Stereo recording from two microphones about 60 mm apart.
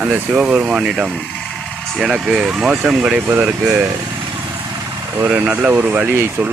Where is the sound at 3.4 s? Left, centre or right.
Right.